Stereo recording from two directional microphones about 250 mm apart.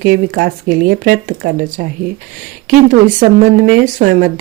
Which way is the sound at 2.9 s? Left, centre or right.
Right.